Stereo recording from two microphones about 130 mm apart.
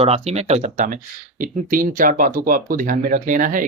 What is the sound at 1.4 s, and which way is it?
Speech, 90° right.